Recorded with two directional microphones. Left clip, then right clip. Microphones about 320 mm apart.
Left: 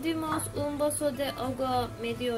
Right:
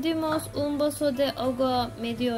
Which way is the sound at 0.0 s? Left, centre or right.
Centre.